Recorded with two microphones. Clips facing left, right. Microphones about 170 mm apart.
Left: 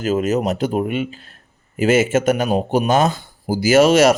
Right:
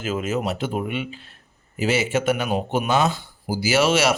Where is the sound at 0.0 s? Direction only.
40° left (ahead or behind).